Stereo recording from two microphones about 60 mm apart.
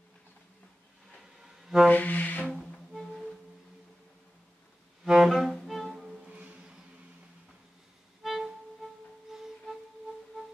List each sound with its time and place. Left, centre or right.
1.4 s music: centre
1.9 s wind instrument: left
2.5 s music: centre
5.0 s music: centre
6.2 s music: right
8.2 s music: centre